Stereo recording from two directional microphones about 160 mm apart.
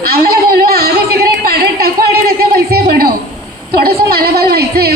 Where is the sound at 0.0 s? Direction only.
70° right (ahead or behind).